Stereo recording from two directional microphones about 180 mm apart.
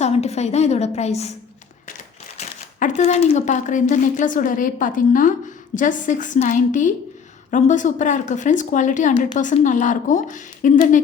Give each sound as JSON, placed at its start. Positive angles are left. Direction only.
{"t": 0.0, "sound": "a woman's voice", "side_deg": 35}
{"t": 2.4, "sound": "speech", "side_deg": 45}